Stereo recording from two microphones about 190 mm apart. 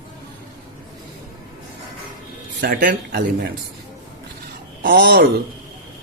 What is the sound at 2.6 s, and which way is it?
Speech, 55° right (ahead or behind).